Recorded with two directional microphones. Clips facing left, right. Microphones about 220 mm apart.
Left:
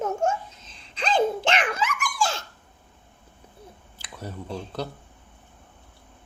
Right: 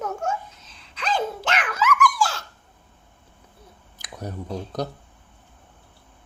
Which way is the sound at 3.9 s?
15° right (ahead or behind).